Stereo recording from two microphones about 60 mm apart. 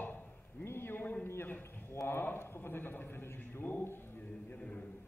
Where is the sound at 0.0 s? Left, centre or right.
Left.